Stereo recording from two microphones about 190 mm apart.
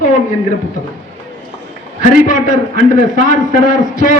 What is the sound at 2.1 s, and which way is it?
A man's voice, 45° left (ahead or behind).